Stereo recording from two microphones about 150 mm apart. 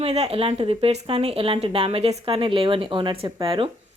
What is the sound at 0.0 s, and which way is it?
Speech, 45° right (ahead or behind).